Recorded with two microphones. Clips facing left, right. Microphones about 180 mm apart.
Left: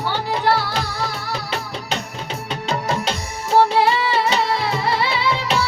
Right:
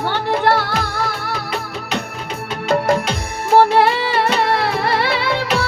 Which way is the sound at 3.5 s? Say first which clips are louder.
Right 3 dB; 55° right (ahead or behind).